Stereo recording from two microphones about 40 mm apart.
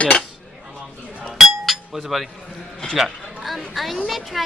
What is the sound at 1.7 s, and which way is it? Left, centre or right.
Chink, centre.